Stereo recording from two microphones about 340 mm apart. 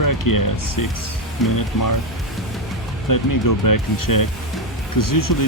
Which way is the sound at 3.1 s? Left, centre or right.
Left.